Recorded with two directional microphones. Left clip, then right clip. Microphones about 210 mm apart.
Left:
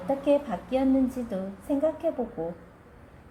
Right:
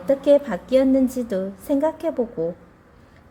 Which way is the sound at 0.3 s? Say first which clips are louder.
Right 8 dB; 50° right (ahead or behind).